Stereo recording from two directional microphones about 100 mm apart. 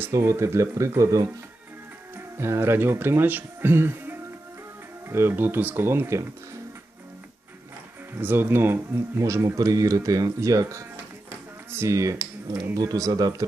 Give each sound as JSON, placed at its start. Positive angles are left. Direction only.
{"t": 0.0, "sound": "speech", "side_deg": -30}
{"t": 8.2, "sound": "speech", "side_deg": -20}